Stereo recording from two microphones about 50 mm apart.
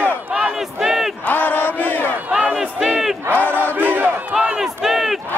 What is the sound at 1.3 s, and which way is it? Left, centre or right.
Battle cry, left.